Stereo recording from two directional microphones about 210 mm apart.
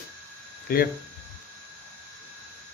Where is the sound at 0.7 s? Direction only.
45° left (ahead or behind).